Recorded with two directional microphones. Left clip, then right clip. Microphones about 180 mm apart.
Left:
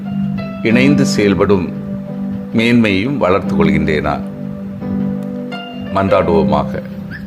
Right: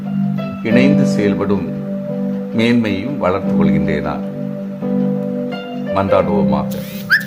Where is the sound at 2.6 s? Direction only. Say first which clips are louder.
Left 3 dB; 25° left (ahead or behind).